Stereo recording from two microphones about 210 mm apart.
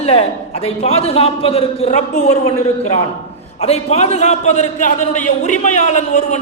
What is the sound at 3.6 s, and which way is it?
A man's voice, 30° left (ahead or behind).